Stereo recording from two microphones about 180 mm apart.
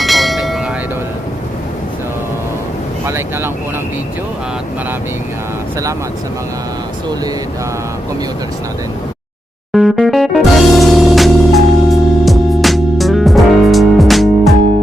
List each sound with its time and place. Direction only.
0.0 s bell: centre (ahead or behind)
3.1 s speech: 15° right (ahead or behind)
9.7 s music: centre (ahead or behind)